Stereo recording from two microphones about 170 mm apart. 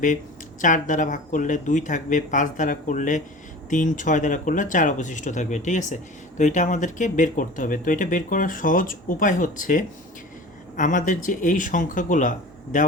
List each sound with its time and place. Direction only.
0.6 s speech: 50° left (ahead or behind)